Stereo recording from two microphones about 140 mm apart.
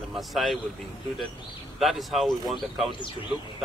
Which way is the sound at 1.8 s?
Centre (ahead or behind).